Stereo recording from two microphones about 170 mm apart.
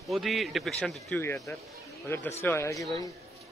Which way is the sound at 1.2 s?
15° left (ahead or behind).